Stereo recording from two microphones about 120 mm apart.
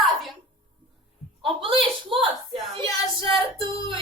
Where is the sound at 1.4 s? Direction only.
45° right (ahead or behind).